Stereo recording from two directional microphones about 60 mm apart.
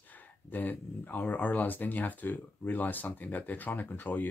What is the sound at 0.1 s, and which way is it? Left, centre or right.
Speech, left.